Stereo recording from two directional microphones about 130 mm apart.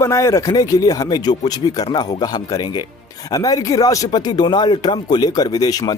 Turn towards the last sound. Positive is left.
turn(degrees=30)  # may be behind; listen again after turning